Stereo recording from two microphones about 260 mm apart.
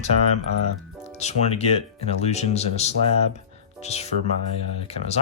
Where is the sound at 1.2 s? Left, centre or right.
Left.